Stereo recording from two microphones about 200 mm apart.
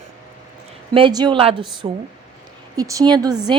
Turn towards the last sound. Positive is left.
turn(degrees=-20)  # may be behind; listen again after turning